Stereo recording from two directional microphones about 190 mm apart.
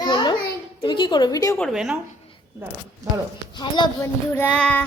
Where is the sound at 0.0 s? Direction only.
25° left (ahead or behind).